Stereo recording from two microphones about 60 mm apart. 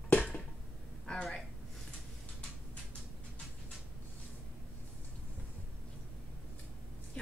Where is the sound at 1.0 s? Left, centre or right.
Centre.